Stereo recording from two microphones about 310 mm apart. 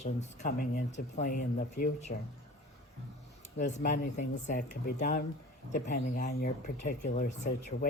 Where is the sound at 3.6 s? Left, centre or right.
Left.